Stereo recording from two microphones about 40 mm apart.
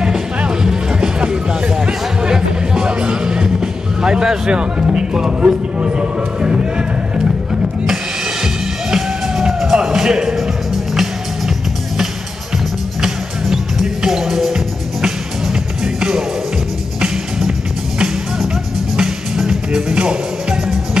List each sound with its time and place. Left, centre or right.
0.4 s music: centre
4.0 s speech: centre
5.4 s speech: right
8.9 s music: centre
13.0 s music: centre